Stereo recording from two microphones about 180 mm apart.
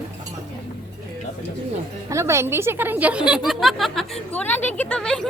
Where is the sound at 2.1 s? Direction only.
15° right (ahead or behind).